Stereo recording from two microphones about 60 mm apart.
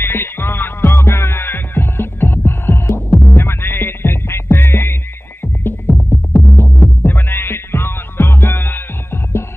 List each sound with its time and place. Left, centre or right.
0.0 s music: left